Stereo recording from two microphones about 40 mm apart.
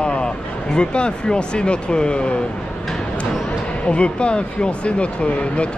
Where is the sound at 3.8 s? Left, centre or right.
Left.